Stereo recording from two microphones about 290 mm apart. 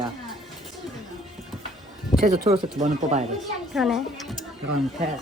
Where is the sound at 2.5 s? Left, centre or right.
Right.